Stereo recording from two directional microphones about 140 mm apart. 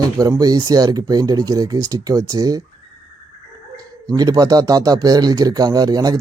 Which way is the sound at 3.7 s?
25° right (ahead or behind).